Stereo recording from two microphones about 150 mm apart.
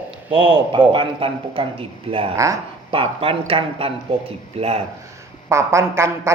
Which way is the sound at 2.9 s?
40° right (ahead or behind).